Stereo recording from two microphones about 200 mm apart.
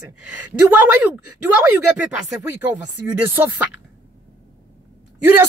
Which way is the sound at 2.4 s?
10° right (ahead or behind).